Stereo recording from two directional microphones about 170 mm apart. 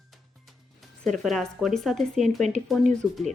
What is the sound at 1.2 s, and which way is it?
Speech, centre (ahead or behind).